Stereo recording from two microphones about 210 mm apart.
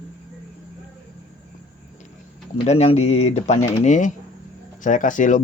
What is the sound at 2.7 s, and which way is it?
Speech, 30° left (ahead or behind).